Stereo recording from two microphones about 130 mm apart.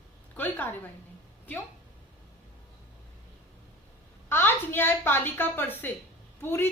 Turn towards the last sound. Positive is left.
turn(degrees=20)  # may be behind; listen again after turning